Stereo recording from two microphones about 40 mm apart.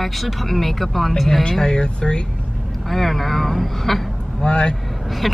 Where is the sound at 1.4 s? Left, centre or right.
Centre.